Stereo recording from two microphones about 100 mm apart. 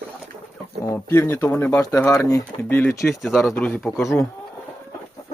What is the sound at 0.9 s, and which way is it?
Speech, 25° left (ahead or behind).